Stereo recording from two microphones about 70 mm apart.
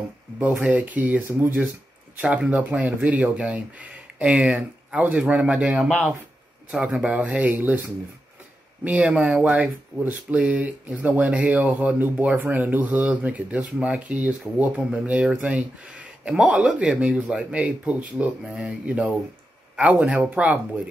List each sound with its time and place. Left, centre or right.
0.4 s speech: centre
8.8 s speech: centre